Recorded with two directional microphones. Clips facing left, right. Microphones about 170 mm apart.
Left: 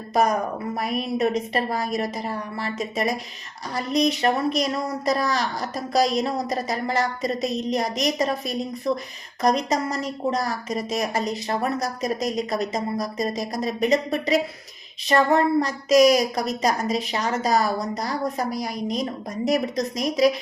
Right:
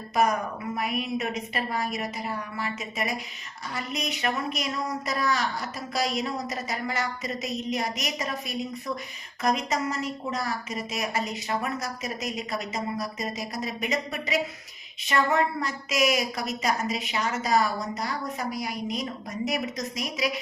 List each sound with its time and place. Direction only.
0.1 s a woman's voice: 40° left (ahead or behind)